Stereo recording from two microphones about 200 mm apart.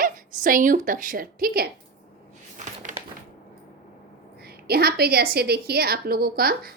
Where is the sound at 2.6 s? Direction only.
40° right (ahead or behind).